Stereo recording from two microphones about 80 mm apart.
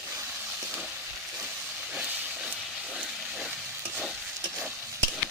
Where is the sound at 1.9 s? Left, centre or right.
Centre.